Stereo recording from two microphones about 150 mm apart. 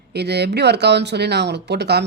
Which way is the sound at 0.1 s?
90° right.